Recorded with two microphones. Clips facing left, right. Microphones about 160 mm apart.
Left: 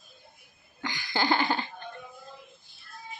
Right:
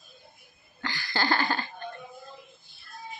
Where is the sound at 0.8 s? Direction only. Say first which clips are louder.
Left 1 dB; 20° left (ahead or behind).